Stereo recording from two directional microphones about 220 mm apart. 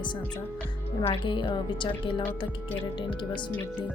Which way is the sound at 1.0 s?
20° left (ahead or behind).